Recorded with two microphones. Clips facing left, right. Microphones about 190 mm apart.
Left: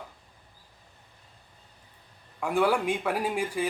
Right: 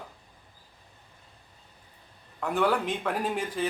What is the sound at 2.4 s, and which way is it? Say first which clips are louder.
Speech: left 1 dB; 10° left (ahead or behind).